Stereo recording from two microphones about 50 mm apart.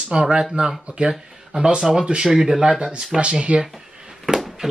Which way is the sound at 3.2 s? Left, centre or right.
Right.